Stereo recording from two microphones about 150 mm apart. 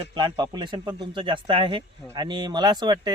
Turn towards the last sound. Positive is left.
turn(degrees=-30)  # may be behind; listen again after turning